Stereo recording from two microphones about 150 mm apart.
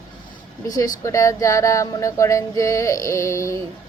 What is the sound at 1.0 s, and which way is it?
A woman's voice, 20° left (ahead or behind).